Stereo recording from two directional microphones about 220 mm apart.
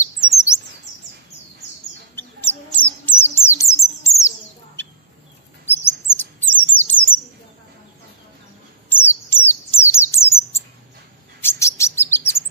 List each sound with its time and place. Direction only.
0.3 s chirp: 15° left (ahead or behind)
2.1 s bird: 10° left (ahead or behind)
5.7 s chirp: 10° left (ahead or behind)
6.9 s bird: 10° left (ahead or behind)
8.8 s bird: 10° left (ahead or behind)
11.4 s chirp: 10° left (ahead or behind)